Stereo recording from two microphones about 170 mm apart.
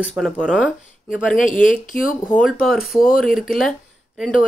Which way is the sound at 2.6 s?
Centre (ahead or behind).